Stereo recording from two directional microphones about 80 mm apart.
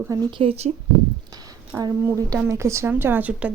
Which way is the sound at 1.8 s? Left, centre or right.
Right.